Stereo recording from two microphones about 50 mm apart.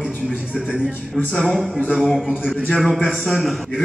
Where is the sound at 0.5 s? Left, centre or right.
Centre.